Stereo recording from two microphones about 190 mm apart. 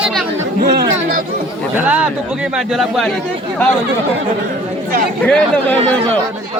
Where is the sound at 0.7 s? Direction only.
60° right (ahead or behind).